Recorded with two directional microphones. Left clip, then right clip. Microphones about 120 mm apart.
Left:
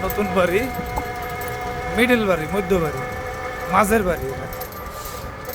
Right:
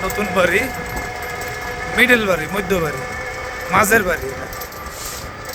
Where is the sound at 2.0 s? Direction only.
5° left (ahead or behind).